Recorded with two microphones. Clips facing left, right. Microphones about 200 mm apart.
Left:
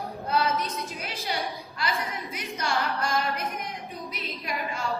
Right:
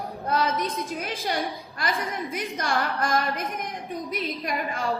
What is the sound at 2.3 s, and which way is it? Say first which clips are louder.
Speech: right 1 dB; 50° right (ahead or behind).